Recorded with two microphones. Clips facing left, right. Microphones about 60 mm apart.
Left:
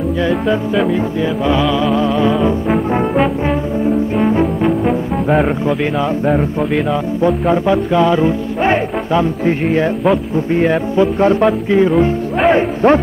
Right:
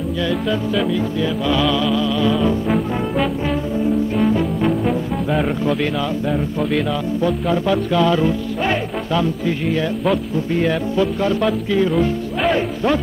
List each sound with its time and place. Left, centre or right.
0.8 s music: left
1.9 s music: left
2.9 s brass instrument: left
6.9 s music: left
12.4 s speech: left